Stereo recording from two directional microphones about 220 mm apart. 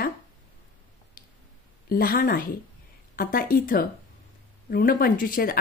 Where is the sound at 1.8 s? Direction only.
40° left (ahead or behind).